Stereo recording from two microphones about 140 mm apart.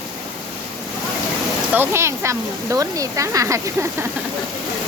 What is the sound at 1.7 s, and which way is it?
Speech, 15° right (ahead or behind).